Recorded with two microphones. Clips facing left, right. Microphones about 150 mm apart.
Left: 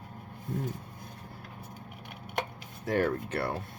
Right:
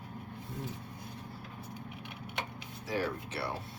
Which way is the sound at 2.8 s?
55° left (ahead or behind).